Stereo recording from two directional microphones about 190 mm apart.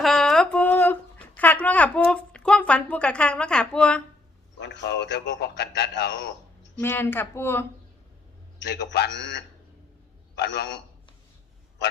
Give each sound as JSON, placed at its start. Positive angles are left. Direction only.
{"t": 0.0, "sound": "a sound", "side_deg": 0}
{"t": 1.4, "sound": "speech", "side_deg": 10}
{"t": 4.6, "sound": "a man's voice", "side_deg": 65}
{"t": 6.7, "sound": "speech", "side_deg": 10}
{"t": 8.5, "sound": "a man's voice", "side_deg": 65}